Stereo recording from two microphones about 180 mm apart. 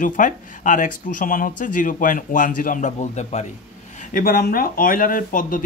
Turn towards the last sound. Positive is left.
turn(degrees=50)  # may be behind; listen again after turning